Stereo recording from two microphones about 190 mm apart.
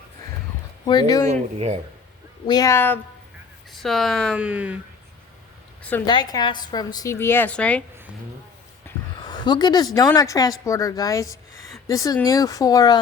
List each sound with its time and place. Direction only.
0.9 s a woman's voice: 20° left (ahead or behind)
1.3 s speech: 35° right (ahead or behind)
2.5 s a woman's voice: 20° left (ahead or behind)
3.7 s speech: centre (ahead or behind)
6.1 s a woman's voice: 20° left (ahead or behind)
8.9 s a sound: 10° left (ahead or behind)
9.2 s a woman's voice: 20° left (ahead or behind)